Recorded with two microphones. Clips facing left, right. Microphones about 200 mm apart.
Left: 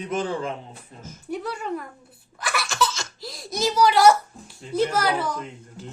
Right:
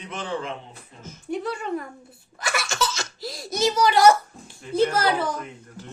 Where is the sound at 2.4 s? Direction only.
Centre (ahead or behind).